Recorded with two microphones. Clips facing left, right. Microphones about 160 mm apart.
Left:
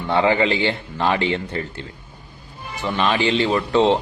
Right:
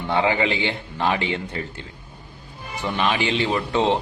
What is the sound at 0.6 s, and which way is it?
Speech, 15° right (ahead or behind).